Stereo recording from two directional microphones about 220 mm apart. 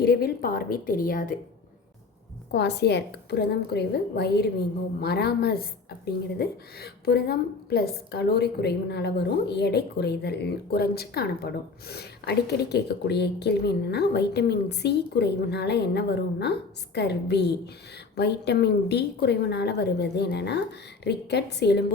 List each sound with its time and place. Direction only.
0.0 s a woman's voice: 45° left (ahead or behind)
2.5 s a woman's voice: 50° left (ahead or behind)